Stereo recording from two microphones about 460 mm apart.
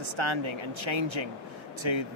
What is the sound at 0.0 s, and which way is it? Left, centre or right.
A man's voice, right.